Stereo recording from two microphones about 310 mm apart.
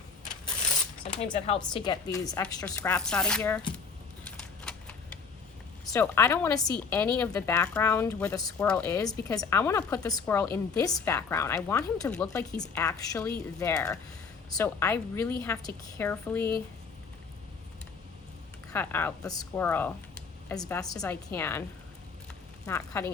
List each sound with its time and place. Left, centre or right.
1.2 s speech: centre
4.3 s typewriter: centre
5.9 s speech: centre
18.7 s speech: centre
22.6 s speech: centre